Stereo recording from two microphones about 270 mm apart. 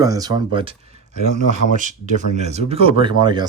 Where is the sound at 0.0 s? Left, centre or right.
Centre.